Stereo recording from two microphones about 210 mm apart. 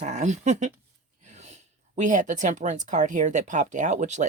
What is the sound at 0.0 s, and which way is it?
Speech, 35° right (ahead or behind).